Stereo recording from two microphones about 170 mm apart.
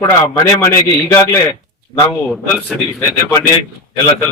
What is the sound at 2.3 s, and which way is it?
Speech, 5° left (ahead or behind).